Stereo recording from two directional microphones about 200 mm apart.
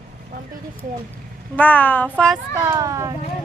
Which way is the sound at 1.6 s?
10° left (ahead or behind).